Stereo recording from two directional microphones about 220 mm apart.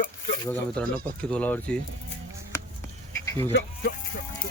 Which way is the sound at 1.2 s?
5° left (ahead or behind).